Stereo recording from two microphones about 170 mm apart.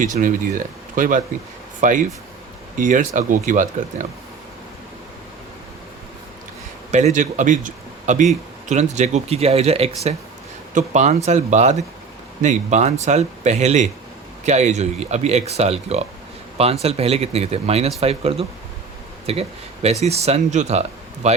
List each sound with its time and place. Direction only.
0.0 s speech: 50° right (ahead or behind)
6.9 s speech: 45° right (ahead or behind)